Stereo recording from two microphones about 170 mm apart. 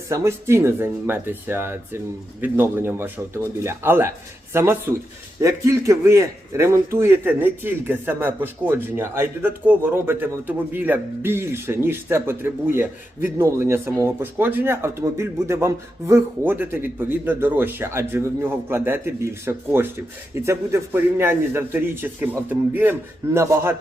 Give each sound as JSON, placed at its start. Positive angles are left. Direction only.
{"t": 0.1, "sound": "a man's voice", "side_deg": -15}